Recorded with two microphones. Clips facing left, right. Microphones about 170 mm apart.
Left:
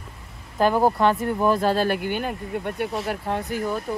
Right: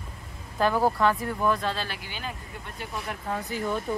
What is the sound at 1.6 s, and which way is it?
Speech, 50° left (ahead or behind).